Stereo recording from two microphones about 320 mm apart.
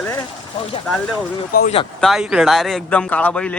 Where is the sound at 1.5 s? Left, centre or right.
Left.